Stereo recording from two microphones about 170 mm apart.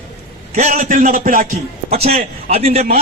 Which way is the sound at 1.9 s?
35° right (ahead or behind).